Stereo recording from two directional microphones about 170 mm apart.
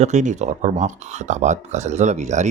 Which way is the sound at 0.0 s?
45° right (ahead or behind).